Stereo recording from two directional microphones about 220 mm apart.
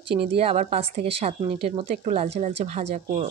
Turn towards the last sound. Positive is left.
turn(degrees=-30)  # may be behind; listen again after turning